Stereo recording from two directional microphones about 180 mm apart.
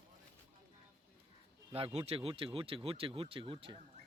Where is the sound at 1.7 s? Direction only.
35° right (ahead or behind).